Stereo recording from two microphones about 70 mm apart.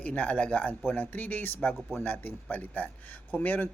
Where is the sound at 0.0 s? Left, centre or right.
Left.